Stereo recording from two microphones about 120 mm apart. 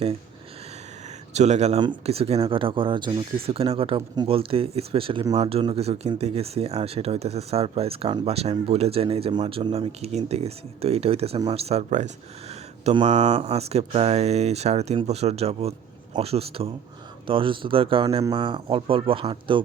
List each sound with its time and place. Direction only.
1.3 s speech: 70° right (ahead or behind); by 3.2 s 35° right (ahead or behind)
3.4 s speech: 55° right (ahead or behind)
17.2 s speech: 45° right (ahead or behind)